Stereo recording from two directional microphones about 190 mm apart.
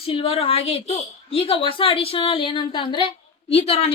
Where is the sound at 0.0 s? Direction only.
30° left (ahead or behind).